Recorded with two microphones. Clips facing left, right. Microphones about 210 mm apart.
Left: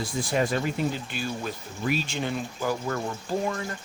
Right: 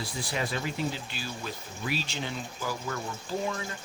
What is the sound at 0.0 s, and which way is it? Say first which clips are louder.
Speech: left 7 dB; 45° left (ahead or behind).